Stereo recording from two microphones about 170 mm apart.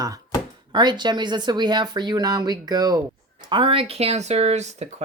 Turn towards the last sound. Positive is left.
turn(degrees=-40)  # may be behind; listen again after turning